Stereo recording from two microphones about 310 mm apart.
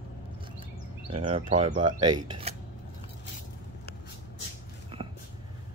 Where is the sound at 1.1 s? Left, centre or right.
Centre.